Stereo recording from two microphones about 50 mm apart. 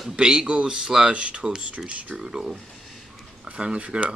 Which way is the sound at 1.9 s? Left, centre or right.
Right.